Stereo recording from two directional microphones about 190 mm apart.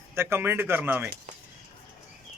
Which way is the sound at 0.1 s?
15° right (ahead or behind).